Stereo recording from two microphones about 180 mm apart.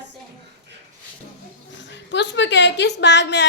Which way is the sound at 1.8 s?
80° left.